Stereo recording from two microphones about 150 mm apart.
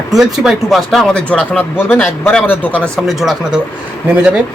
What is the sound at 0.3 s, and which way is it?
Speech, centre (ahead or behind).